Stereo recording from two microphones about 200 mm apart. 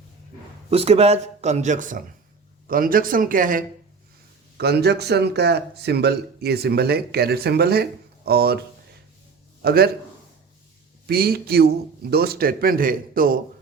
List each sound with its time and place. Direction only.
0.7 s speech: 30° right (ahead or behind)
4.5 s speech: 55° right (ahead or behind)
9.6 s a man's voice: 50° right (ahead or behind)
11.0 s speech: 50° right (ahead or behind)